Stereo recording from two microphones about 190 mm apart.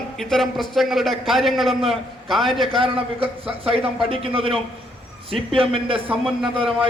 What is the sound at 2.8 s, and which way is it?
A man's voice, 30° right (ahead or behind).